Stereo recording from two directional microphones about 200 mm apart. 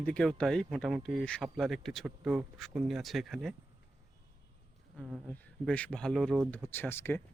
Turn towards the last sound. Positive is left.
turn(degrees=10)  # may be behind; listen again after turning